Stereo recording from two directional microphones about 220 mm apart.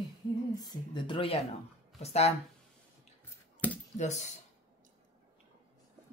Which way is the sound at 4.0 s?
30° left (ahead or behind).